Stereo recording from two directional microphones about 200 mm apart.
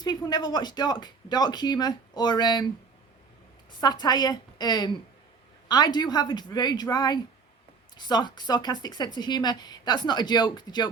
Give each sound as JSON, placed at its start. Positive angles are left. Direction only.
{"t": 0.0, "sound": "speech", "side_deg": 20}
{"t": 3.8, "sound": "speech", "side_deg": 20}